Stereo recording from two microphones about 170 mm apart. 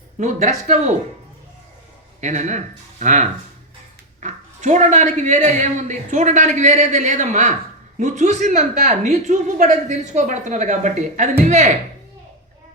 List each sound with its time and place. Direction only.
0.2 s speech: 45° right (ahead or behind)
2.2 s speech: 45° right (ahead or behind)